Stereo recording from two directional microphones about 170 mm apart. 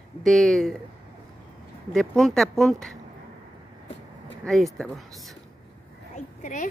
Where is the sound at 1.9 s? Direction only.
Centre (ahead or behind).